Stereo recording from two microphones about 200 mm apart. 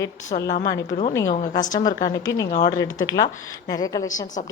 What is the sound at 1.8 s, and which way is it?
Speech, 40° left (ahead or behind).